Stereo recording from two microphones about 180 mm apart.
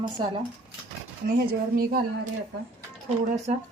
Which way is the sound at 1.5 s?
55° right (ahead or behind).